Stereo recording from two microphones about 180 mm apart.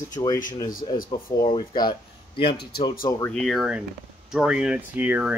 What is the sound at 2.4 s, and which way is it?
Speech, 60° left (ahead or behind).